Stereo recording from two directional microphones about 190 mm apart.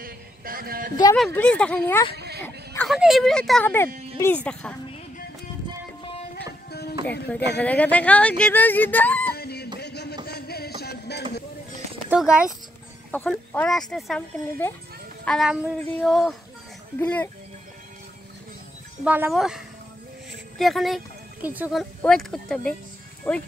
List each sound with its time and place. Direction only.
0.0 s a sound: 50° right (ahead or behind)
1.1 s speech: 5° left (ahead or behind)
2.1 s a sound: 60° right (ahead or behind)
2.4 s a sound: 10° left (ahead or behind)
2.9 s speech: centre (ahead or behind)
6.3 s music: 55° left (ahead or behind)
7.5 s speech: 5° left (ahead or behind)
9.4 s music: 55° left (ahead or behind)
9.8 s a sound: 60° left (ahead or behind)
12.1 s speech: 5° right (ahead or behind)
13.1 s speech: 10° left (ahead or behind)
15.2 s speech: centre (ahead or behind)
19.0 s speech: 10° right (ahead or behind)
22.0 s speech: centre (ahead or behind)